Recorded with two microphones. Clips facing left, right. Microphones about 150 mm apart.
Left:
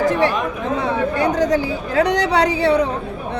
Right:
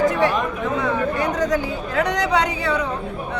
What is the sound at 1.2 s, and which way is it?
A woman's voice, 30° left (ahead or behind).